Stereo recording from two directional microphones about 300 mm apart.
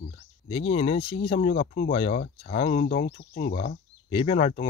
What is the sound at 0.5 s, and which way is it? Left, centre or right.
Speech, centre.